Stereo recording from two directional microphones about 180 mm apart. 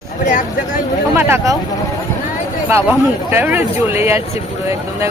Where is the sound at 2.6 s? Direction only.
15° right (ahead or behind).